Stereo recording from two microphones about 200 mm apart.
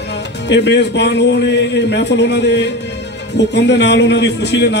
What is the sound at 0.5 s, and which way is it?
A man's voice, 60° left (ahead or behind).